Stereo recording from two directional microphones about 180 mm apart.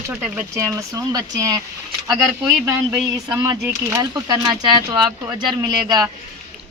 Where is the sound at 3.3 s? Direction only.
20° right (ahead or behind).